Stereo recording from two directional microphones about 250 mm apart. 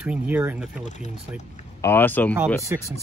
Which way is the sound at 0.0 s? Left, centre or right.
Centre.